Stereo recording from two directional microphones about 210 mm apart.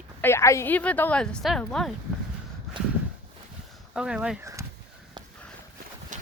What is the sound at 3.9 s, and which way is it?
Speech, 5° right (ahead or behind).